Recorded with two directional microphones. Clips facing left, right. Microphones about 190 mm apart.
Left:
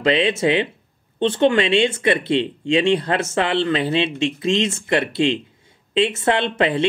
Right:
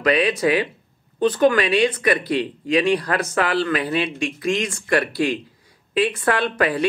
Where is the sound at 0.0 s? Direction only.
25° left (ahead or behind).